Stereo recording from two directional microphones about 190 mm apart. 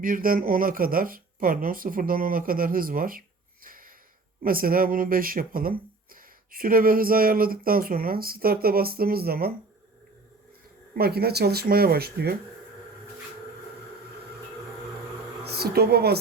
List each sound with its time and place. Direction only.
0.0 s speech: 45° right (ahead or behind)
10.9 s speech: 55° right (ahead or behind)
15.4 s a woman's voice: 55° right (ahead or behind)